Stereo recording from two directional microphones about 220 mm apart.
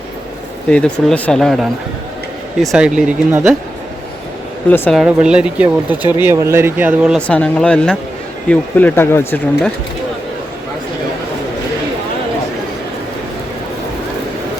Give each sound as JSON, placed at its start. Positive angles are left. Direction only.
{"t": 0.7, "sound": "speech", "side_deg": 5}
{"t": 4.7, "sound": "speech", "side_deg": 10}
{"t": 4.9, "sound": "speech", "side_deg": -5}
{"t": 6.0, "sound": "speech", "side_deg": 20}
{"t": 6.2, "sound": "speech", "side_deg": -10}